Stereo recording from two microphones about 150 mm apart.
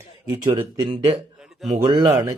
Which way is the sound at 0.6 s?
35° right (ahead or behind).